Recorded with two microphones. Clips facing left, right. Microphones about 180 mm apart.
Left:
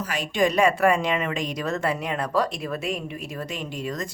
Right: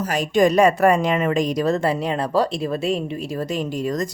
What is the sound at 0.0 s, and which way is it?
A woman's voice, 40° right (ahead or behind).